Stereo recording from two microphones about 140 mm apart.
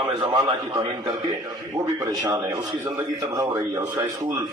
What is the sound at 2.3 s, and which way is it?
Speech, 25° right (ahead or behind).